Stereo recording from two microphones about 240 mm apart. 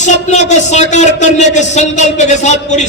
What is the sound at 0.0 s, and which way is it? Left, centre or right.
A man's voice, left.